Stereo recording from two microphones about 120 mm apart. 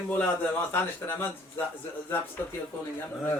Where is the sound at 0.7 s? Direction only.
15° left (ahead or behind).